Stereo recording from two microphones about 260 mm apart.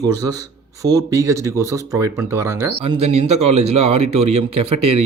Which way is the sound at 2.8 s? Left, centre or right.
Right.